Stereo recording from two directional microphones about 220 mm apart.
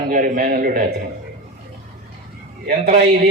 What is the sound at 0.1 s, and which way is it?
Speech, 40° right (ahead or behind).